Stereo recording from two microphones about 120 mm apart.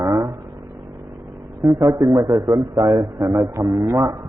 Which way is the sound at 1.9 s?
45° right (ahead or behind).